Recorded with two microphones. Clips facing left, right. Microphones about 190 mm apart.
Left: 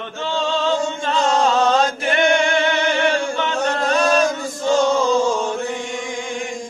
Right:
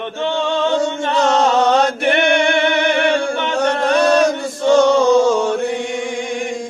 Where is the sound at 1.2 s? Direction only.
70° right (ahead or behind).